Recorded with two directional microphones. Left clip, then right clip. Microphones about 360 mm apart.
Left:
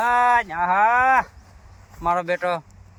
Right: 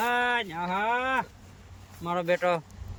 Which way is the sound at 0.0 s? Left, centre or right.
Centre.